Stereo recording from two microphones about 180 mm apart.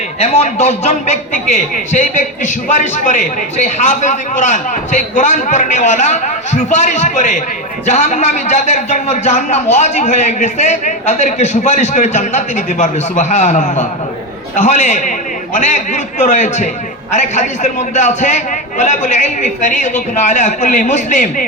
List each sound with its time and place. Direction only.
0.2 s a man's voice: 35° left (ahead or behind)